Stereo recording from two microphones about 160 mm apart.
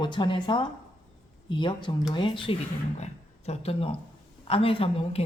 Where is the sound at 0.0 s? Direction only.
30° left (ahead or behind).